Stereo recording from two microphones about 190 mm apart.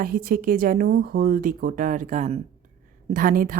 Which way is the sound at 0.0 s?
50° right (ahead or behind).